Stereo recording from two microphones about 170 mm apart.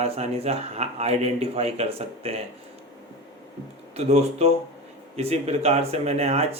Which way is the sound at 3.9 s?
40° right (ahead or behind).